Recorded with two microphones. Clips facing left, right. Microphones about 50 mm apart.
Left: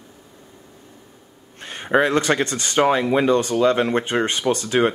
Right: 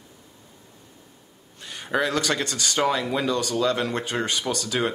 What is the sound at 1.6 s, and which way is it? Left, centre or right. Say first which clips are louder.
Speech: left 6 dB; left.